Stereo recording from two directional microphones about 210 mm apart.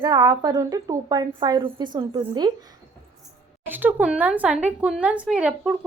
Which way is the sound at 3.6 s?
10° right (ahead or behind).